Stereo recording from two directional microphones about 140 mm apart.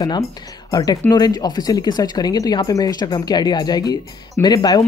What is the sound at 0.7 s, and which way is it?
Speech, 25° left (ahead or behind).